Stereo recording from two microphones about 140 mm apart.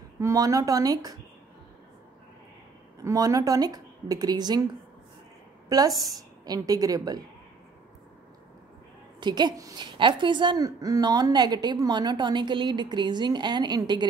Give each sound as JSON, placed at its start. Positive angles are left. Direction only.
{"t": 0.2, "sound": "speech", "side_deg": -25}
{"t": 3.0, "sound": "speech", "side_deg": -25}
{"t": 5.7, "sound": "speech", "side_deg": -25}
{"t": 9.2, "sound": "a woman's voice", "side_deg": -30}